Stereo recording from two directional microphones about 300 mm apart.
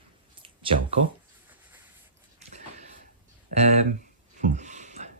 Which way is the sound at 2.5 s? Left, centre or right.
Right.